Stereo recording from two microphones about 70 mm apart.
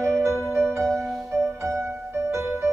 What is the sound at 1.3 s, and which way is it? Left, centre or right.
Music, right.